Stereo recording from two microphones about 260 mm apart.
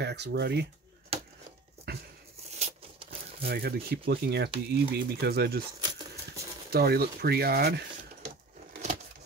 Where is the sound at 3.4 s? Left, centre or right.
Right.